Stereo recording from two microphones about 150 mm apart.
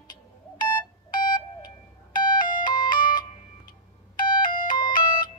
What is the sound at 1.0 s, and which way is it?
Beep, 65° left (ahead or behind).